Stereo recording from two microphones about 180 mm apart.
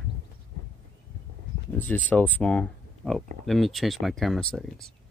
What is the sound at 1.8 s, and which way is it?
Speech, 10° left (ahead or behind).